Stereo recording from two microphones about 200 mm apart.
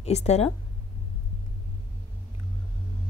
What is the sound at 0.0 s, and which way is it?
Speech, 30° left (ahead or behind).